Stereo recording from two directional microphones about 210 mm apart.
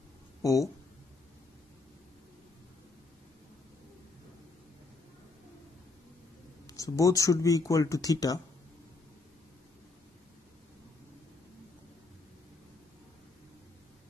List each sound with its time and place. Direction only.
0.4 s speech: 15° left (ahead or behind)
6.7 s speech: 15° left (ahead or behind)